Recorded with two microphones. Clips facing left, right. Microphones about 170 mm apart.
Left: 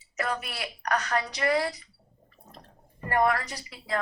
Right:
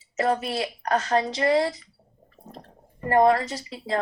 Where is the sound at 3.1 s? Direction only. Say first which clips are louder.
Right 6 dB; 25° right (ahead or behind).